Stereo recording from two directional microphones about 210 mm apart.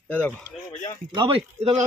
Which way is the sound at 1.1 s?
25° right (ahead or behind).